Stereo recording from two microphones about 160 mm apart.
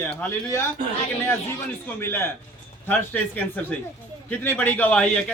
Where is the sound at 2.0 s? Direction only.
15° left (ahead or behind).